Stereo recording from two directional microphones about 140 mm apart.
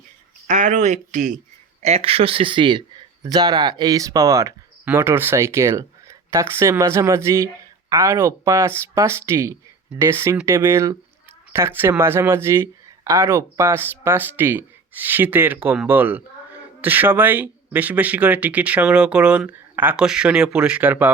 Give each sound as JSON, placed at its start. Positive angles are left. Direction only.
{"t": 0.4, "sound": "speech", "side_deg": -65}
{"t": 1.8, "sound": "speech", "side_deg": -45}